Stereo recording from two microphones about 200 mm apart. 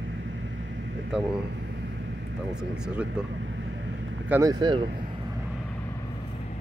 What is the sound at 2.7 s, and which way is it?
Speech, 5° right (ahead or behind).